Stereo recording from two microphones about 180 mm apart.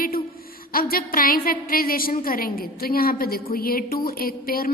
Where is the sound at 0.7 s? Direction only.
55° left (ahead or behind).